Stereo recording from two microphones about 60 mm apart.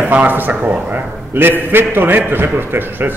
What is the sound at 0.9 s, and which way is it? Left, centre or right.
A man's voice, right.